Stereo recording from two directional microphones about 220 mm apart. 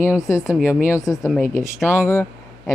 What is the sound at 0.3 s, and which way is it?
A woman's voice, 15° left (ahead or behind).